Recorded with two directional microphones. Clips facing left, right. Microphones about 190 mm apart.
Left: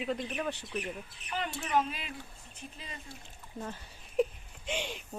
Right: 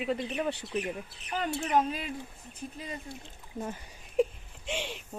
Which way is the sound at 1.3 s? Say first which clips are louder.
Right 4 dB; 40° right (ahead or behind).